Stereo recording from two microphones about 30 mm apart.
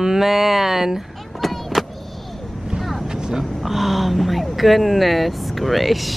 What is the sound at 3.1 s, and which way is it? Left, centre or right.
Vehicle, centre.